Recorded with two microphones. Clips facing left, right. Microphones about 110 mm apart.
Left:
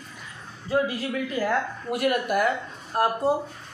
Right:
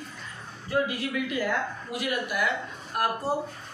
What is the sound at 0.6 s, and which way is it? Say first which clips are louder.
Speech: left 3 dB; 35° left (ahead or behind).